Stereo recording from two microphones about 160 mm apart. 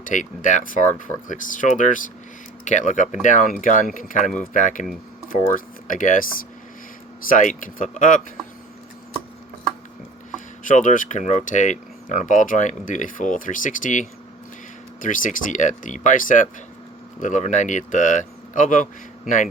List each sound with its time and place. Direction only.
0.0 s speech: 55° left (ahead or behind)
5.9 s speech: 55° left (ahead or behind)
7.3 s speech: 55° left (ahead or behind)
10.6 s speech: 55° left (ahead or behind)